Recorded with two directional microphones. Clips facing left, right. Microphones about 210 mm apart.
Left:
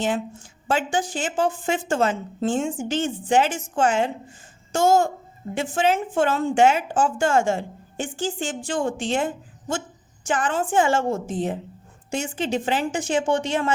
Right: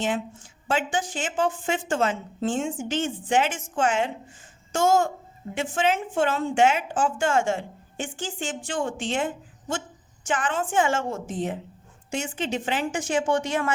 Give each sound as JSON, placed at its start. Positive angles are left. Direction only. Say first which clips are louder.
{"t": 0.7, "sound": "a woman's voice", "louder": "left 3 dB", "side_deg": 40}